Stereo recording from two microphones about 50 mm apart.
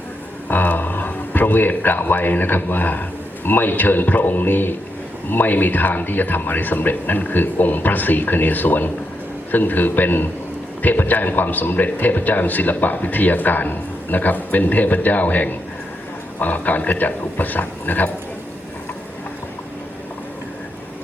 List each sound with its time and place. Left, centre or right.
0.4 s a man's voice: left